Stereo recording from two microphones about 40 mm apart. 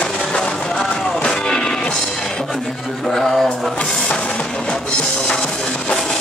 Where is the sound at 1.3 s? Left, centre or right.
Centre.